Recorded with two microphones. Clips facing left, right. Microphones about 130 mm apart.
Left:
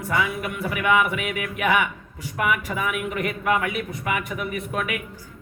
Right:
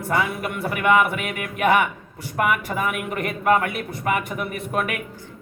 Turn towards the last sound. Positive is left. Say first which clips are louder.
# right 2 dB
turn(degrees=-45)  # may be behind; listen again after turning